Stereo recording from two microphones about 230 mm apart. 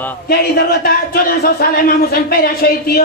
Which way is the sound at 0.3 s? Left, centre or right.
Left.